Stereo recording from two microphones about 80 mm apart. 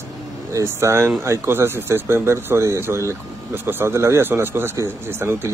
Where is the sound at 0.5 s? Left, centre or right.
Right.